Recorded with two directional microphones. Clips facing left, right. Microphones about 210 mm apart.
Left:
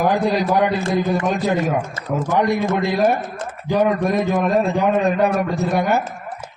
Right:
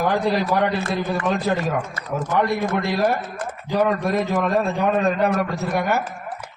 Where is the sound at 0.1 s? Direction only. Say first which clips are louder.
Left 2 dB; 15° left (ahead or behind).